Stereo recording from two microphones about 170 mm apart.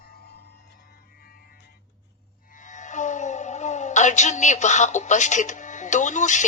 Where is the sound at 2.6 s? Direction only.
45° left (ahead or behind).